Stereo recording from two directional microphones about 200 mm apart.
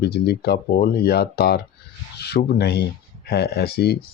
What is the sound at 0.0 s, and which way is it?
Speech, 55° left (ahead or behind).